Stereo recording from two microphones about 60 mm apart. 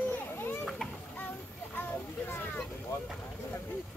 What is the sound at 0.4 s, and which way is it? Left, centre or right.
Children playing, left.